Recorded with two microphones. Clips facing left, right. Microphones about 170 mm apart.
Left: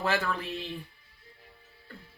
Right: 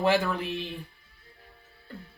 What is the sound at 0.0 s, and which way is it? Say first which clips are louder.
Speech: right 5 dB; 20° right (ahead or behind).